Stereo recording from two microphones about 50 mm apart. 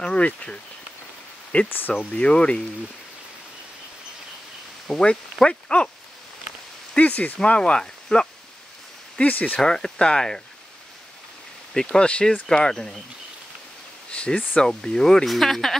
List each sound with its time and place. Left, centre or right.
0.0 s speech: left
1.7 s speech: left
2.0 s speech: left
4.8 s speech: centre
7.0 s speech: left
9.3 s speech: left
9.6 s speech: centre
11.7 s speech: centre
14.1 s speech: left
15.2 s speech: centre